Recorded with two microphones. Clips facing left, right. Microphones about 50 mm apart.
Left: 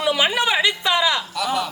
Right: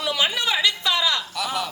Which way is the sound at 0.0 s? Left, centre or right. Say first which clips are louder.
Left 4 dB; left.